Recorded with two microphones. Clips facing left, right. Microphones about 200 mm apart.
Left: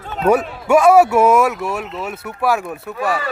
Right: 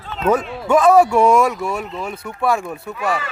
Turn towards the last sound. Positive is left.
turn(degrees=0)  # may be behind; listen again after turning